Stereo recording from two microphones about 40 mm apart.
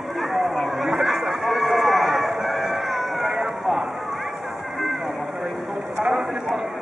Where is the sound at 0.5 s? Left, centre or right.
Centre.